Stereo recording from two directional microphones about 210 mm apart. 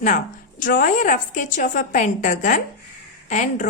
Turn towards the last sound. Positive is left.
turn(degrees=35)  # may be behind; listen again after turning